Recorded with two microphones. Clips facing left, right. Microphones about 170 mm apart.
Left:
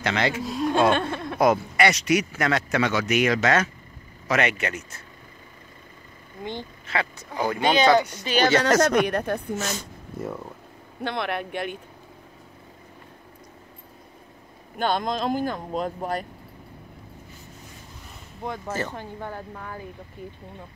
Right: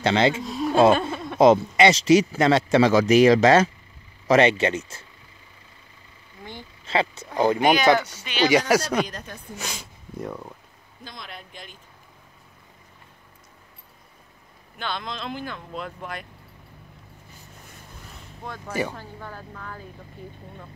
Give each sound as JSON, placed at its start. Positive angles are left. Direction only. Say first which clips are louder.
{"t": 0.0, "sound": "speech", "louder": "right 5 dB", "side_deg": -25}
{"t": 0.4, "sound": "speech", "louder": "left 1 dB", "side_deg": 0}
{"t": 0.9, "sound": "a sound", "louder": "even", "side_deg": -5}
{"t": 1.4, "sound": "speech", "louder": "right 5 dB", "side_deg": -25}
{"t": 6.9, "sound": "speech", "louder": "right 5 dB", "side_deg": -25}
{"t": 8.2, "sound": "speech", "louder": "left 2 dB", "side_deg": 40}
{"t": 8.5, "sound": "speech", "louder": "even", "side_deg": -10}
{"t": 9.0, "sound": "a woman's voice", "louder": "left 12 dB", "side_deg": 60}
{"t": 9.6, "sound": "speech", "louder": "left 6 dB", "side_deg": -10}
{"t": 10.1, "sound": "speech", "louder": "left 1 dB", "side_deg": 0}
{"t": 11.0, "sound": "speech", "louder": "left 13 dB", "side_deg": 65}
{"t": 14.8, "sound": "speech", "louder": "left 8 dB", "side_deg": 45}
{"t": 18.7, "sound": "speech", "louder": "right 4 dB", "side_deg": -10}
{"t": 18.9, "sound": "speech", "louder": "left 4 dB", "side_deg": 25}